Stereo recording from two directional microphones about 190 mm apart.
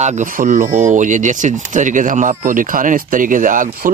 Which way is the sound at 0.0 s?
40° right (ahead or behind).